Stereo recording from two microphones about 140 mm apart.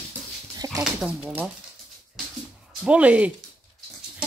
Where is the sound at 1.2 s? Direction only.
15° right (ahead or behind).